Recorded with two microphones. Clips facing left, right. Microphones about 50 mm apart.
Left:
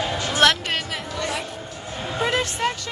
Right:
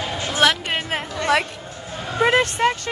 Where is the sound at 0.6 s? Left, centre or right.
Right.